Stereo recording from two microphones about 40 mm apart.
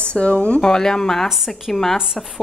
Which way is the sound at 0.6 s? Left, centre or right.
Centre.